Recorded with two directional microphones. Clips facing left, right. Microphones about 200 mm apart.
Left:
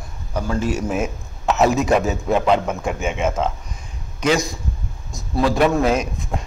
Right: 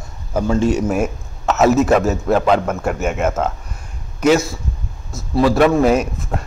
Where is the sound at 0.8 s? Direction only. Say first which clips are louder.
Right 4 dB; 10° right (ahead or behind).